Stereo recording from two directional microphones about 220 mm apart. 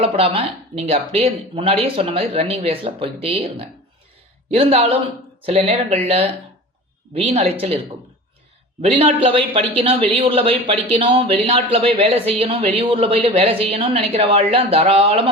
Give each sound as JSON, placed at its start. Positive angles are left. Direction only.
{"t": 0.0, "sound": "speech", "side_deg": -25}
{"t": 7.1, "sound": "speech", "side_deg": -25}
{"t": 8.8, "sound": "speech", "side_deg": -25}